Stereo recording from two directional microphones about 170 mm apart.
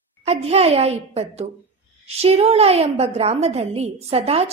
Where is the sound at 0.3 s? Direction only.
35° right (ahead or behind).